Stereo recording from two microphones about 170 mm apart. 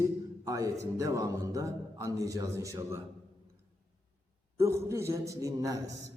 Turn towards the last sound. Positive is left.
turn(degrees=-20)  # may be behind; listen again after turning